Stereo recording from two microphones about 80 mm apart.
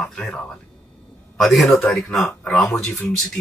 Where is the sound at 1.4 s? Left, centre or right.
Centre.